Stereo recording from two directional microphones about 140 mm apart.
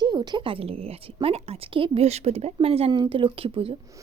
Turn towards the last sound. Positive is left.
turn(degrees=-45)  # may be behind; listen again after turning